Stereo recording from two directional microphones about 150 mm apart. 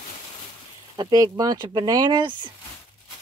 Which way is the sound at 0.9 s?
25° right (ahead or behind).